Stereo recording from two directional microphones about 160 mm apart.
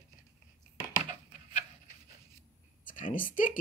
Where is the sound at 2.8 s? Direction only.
55° left (ahead or behind).